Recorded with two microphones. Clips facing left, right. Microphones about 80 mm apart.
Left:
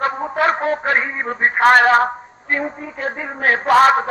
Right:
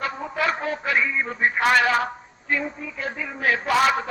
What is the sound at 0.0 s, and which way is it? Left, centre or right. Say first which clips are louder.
A man's voice: left 7 dB; left.